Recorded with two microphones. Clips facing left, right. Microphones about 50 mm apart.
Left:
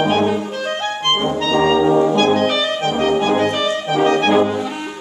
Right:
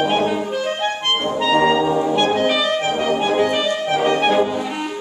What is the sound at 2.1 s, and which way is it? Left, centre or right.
Music, centre.